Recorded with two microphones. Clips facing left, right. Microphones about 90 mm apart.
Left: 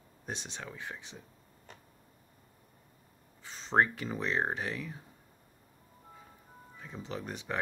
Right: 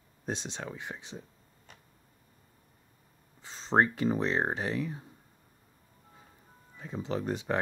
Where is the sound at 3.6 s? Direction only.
30° right (ahead or behind).